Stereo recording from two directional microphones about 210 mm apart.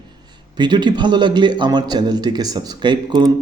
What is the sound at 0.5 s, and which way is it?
A man's voice, 20° right (ahead or behind).